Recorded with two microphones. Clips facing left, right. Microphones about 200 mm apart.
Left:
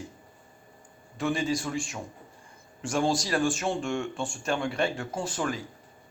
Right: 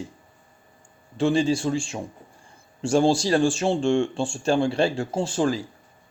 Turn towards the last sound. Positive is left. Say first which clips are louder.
# right 7 dB
turn(degrees=-30)  # may be behind; listen again after turning